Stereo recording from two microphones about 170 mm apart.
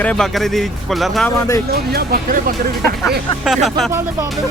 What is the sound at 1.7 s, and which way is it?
Speech, 65° right (ahead or behind).